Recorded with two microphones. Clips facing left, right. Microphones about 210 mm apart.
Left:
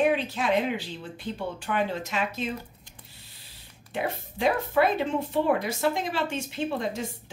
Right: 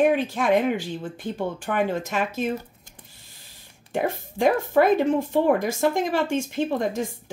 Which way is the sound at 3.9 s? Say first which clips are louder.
Right 5 dB; 45° right (ahead or behind).